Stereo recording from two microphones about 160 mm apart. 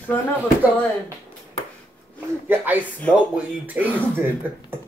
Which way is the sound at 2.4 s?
10° right (ahead or behind).